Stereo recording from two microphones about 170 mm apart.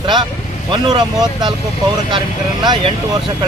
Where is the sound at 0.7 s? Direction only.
25° right (ahead or behind).